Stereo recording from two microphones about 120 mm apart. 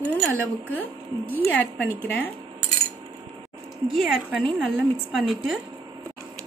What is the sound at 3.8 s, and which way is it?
Speech, centre (ahead or behind).